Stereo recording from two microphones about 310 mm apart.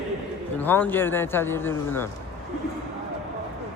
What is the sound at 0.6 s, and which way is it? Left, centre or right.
Speech, centre.